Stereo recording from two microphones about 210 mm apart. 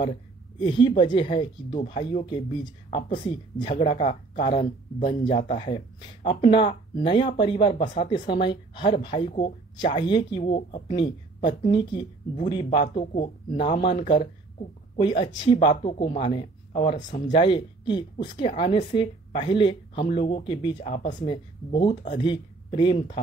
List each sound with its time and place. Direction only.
0.6 s speech: 25° left (ahead or behind)
16.7 s speech: 35° left (ahead or behind)
17.3 s speech: 20° left (ahead or behind)
20.8 s speech: 35° left (ahead or behind)
21.2 s speech: 20° left (ahead or behind)